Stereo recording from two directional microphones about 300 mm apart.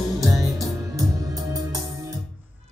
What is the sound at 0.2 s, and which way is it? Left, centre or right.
Music, centre.